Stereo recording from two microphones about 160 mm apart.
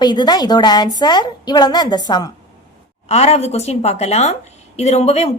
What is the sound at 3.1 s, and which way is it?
Speech, 40° left (ahead or behind).